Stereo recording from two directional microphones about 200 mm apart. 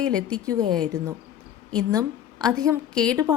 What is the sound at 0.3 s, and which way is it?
Speech, 20° right (ahead or behind).